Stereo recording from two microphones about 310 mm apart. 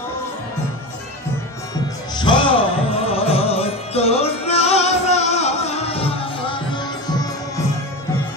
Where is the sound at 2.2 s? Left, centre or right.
Centre.